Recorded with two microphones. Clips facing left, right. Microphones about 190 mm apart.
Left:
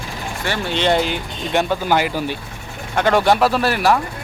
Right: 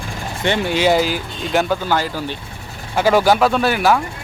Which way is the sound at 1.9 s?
15° left (ahead or behind).